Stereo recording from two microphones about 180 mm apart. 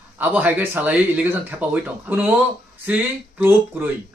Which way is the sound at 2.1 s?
10° right (ahead or behind).